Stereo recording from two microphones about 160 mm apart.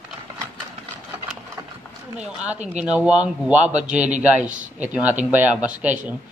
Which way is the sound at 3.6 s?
45° right (ahead or behind).